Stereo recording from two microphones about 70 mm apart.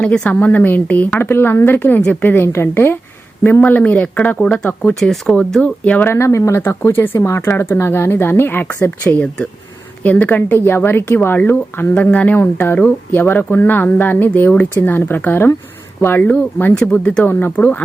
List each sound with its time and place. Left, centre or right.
0.0 s speech: centre
0.3 s speech: left
6.1 s speech: left
9.1 s speech: centre